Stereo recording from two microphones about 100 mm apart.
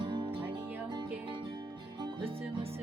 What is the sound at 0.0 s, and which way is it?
Music, 55° right (ahead or behind).